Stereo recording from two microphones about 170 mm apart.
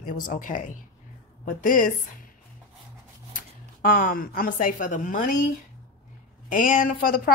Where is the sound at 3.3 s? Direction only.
60° left (ahead or behind).